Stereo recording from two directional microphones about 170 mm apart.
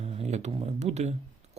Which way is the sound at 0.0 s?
40° right (ahead or behind).